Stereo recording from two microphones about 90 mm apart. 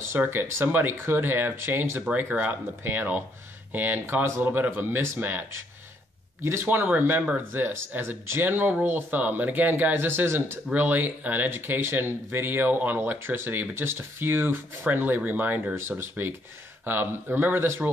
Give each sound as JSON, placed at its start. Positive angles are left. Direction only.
{"t": 0.2, "sound": "speech", "side_deg": -25}